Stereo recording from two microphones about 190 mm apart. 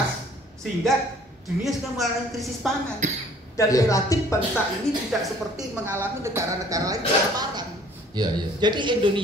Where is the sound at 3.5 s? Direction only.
15° left (ahead or behind).